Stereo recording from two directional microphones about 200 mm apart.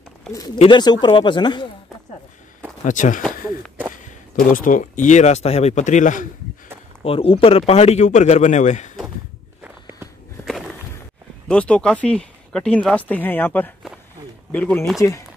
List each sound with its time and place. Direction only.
0.6 s speech: 25° left (ahead or behind)
2.8 s speech: 40° left (ahead or behind)
3.3 s a sound: centre (ahead or behind)
4.5 s speech: 40° left (ahead or behind)
7.1 s speech: 25° left (ahead or behind)
9.6 s walk: 5° right (ahead or behind)
11.4 s speech: 5° left (ahead or behind)